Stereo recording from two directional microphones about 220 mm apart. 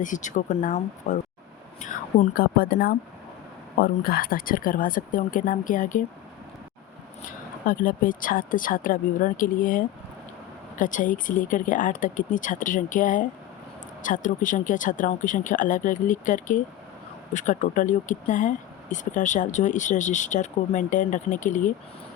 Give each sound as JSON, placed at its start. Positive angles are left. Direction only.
{"t": 0.0, "sound": "speech", "side_deg": 35}
{"t": 7.6, "sound": "speech", "side_deg": 40}